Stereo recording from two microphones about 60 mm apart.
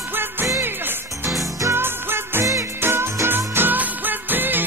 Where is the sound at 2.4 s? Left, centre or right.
Right.